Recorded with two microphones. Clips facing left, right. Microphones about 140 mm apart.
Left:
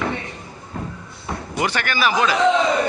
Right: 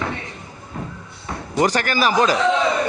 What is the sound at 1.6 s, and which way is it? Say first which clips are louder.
Speech: right 3 dB; 40° right (ahead or behind).